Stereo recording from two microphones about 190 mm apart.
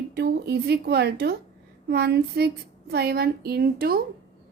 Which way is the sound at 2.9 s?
55° right (ahead or behind).